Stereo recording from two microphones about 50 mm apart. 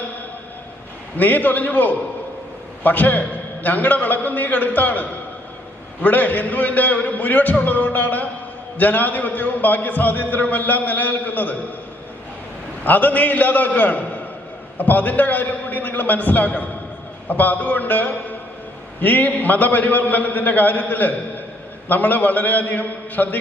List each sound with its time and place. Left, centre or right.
1.2 s a man's voice: left
12.8 s a man's voice: left